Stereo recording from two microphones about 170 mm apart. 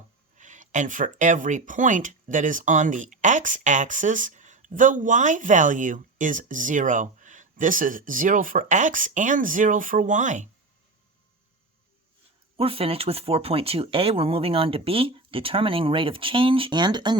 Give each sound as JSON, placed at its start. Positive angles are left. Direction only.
{"t": 0.3, "sound": "speech", "side_deg": -45}
{"t": 12.5, "sound": "speech", "side_deg": -35}